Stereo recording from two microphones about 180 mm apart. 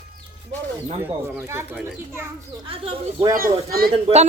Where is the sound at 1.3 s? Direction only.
15° right (ahead or behind).